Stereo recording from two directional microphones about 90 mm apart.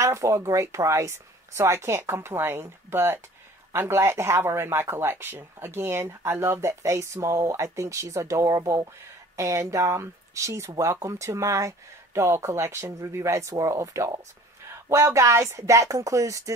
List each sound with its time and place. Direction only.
0.0 s speech: 35° right (ahead or behind)